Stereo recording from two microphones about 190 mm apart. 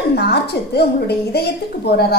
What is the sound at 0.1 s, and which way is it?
A woman's voice, 60° left (ahead or behind).